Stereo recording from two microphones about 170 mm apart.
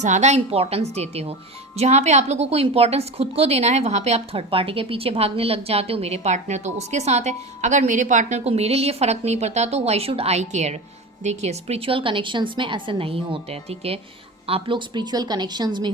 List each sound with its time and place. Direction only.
0.0 s a woman's voice: 45° right (ahead or behind); by 15.9 s 25° right (ahead or behind)